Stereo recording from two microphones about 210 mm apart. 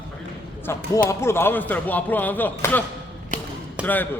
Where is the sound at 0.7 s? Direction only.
15° left (ahead or behind).